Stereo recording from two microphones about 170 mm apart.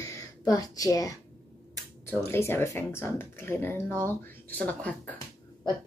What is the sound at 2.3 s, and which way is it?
Speech, 15° left (ahead or behind).